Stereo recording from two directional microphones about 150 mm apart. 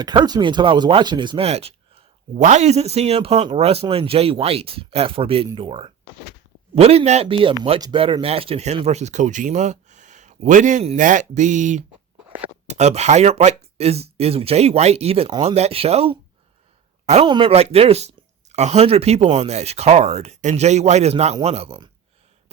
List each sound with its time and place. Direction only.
0.0 s speech: 30° right (ahead or behind)
1.5 s speech: 45° right (ahead or behind)
17.2 s speech: 30° right (ahead or behind)
17.5 s speech: 45° right (ahead or behind)